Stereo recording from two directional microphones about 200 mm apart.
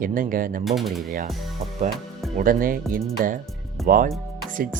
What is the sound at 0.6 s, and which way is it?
Speech, centre (ahead or behind).